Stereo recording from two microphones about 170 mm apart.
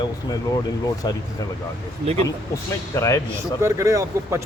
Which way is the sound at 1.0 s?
25° left (ahead or behind).